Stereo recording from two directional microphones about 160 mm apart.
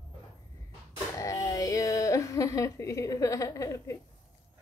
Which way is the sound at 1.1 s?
20° left (ahead or behind).